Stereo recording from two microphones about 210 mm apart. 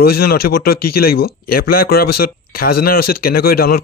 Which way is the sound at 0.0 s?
45° left (ahead or behind).